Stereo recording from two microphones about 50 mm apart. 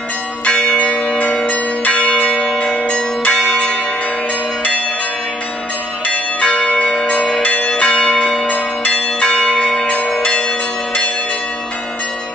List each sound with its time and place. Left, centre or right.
0.5 s church bell: left
1.2 s change ringing: left
2.5 s change ringing: centre
6.0 s change ringing: left
7.4 s church bell: left